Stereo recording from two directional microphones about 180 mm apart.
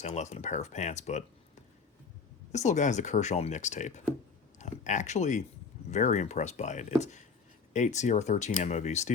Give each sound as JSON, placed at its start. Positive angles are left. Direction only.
{"t": 0.0, "sound": "speech", "side_deg": 40}
{"t": 2.5, "sound": "speech", "side_deg": 40}